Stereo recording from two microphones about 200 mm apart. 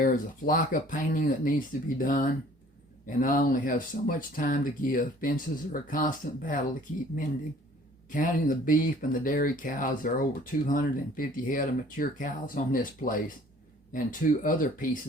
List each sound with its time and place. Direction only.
0.0 s speech: 45° left (ahead or behind)
8.1 s speech: 40° left (ahead or behind)